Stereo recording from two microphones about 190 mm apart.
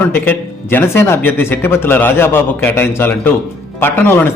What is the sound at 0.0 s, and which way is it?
A man's voice, 10° left (ahead or behind).